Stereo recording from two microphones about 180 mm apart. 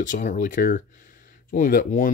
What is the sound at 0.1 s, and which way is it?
Speech, 45° left (ahead or behind).